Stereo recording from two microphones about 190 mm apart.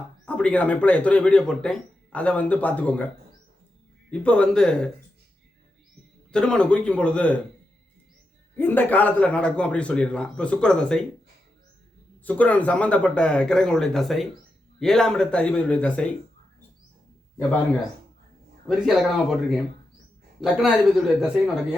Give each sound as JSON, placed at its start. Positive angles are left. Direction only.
{"t": 0.3, "sound": "speech", "side_deg": 5}
{"t": 4.1, "sound": "a man's voice", "side_deg": 5}
{"t": 6.3, "sound": "a man's voice", "side_deg": 5}
{"t": 8.5, "sound": "a man's voice", "side_deg": 10}
{"t": 12.2, "sound": "a man's voice", "side_deg": 10}
{"t": 18.9, "sound": "a man's voice", "side_deg": 0}